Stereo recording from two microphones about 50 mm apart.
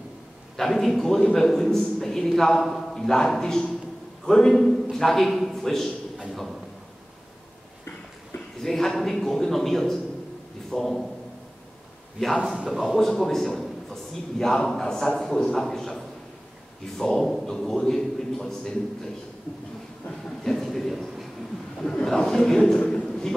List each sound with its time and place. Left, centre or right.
0.6 s a man's voice: centre
8.6 s a man's voice: centre
12.4 s a man's voice: centre
12.6 s a man's voice: centre
13.0 s a man's voice: centre
20.4 s a sound: centre
21.9 s a sound: centre